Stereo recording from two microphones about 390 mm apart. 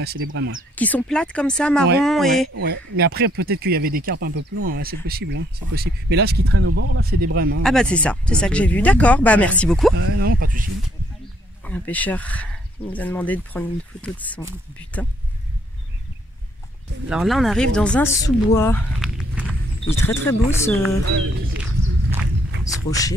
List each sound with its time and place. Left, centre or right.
0.0 s speech: right
0.7 s speech: centre
2.5 s speech: right
7.6 s speech: centre
9.9 s speech: right
11.6 s speech: centre
17.1 s speech: centre
19.8 s speech: centre
22.8 s speech: centre